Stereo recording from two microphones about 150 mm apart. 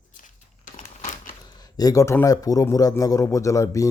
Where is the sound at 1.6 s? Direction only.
25° left (ahead or behind).